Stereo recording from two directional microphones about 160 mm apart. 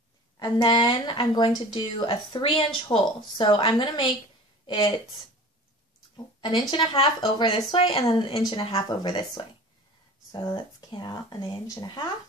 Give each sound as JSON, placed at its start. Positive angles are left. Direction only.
{"t": 0.4, "sound": "a woman's voice", "side_deg": 30}
{"t": 6.1, "sound": "a woman's voice", "side_deg": 25}